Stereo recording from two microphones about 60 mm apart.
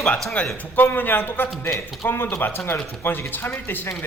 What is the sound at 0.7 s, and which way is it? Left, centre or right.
A man's voice, left.